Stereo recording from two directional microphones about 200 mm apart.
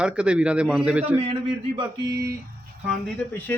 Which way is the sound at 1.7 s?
20° right (ahead or behind).